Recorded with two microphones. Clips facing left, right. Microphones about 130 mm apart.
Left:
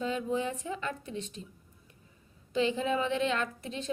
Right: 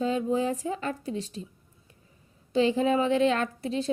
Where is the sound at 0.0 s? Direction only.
35° right (ahead or behind).